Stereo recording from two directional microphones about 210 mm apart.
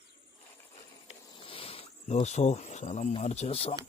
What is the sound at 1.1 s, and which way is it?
Cricket, 25° left (ahead or behind).